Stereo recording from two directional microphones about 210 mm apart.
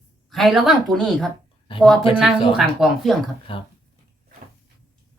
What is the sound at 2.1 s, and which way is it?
A woman's voice, 5° right (ahead or behind).